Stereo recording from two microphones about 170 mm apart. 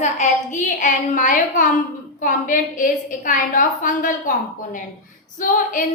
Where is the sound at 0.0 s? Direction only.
45° left (ahead or behind).